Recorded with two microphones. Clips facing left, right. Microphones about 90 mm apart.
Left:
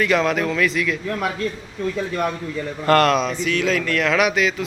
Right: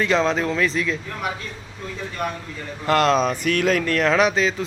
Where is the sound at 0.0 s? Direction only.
25° right (ahead or behind).